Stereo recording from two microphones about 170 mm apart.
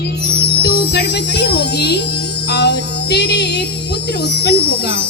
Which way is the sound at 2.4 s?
80° left.